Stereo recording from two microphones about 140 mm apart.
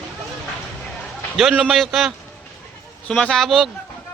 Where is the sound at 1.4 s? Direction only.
5° right (ahead or behind).